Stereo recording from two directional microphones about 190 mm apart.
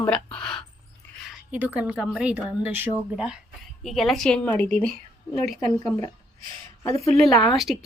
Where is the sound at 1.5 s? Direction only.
10° right (ahead or behind).